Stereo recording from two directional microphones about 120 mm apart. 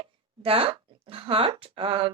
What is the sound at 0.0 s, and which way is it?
A woman's voice, 50° right (ahead or behind).